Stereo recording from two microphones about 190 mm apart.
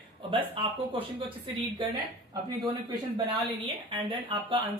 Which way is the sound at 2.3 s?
20° right (ahead or behind).